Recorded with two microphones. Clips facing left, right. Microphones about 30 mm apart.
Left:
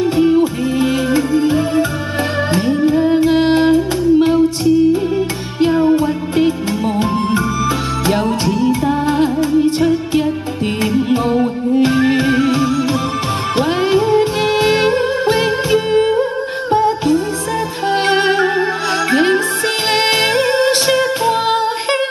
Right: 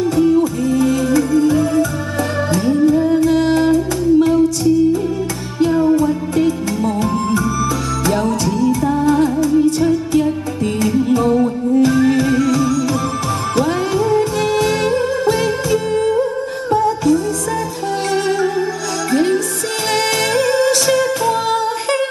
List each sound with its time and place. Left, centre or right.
0.0 s music: left